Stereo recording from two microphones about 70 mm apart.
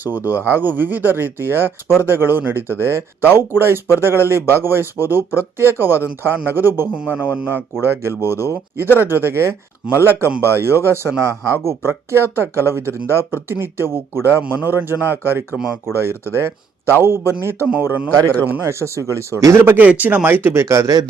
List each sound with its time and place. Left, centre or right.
0.3 s speech: right
6.9 s speech: centre
15.5 s speech: centre
15.9 s speech: right
17.8 s speech: right
19.6 s speech: right